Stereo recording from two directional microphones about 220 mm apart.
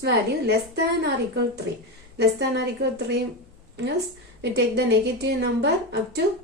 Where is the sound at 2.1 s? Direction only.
50° right (ahead or behind).